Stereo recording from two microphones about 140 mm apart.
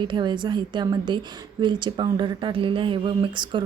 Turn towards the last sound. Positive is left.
turn(degrees=-35)  # may be behind; listen again after turning